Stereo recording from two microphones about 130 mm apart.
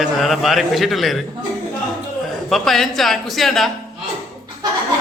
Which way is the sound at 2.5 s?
Centre (ahead or behind).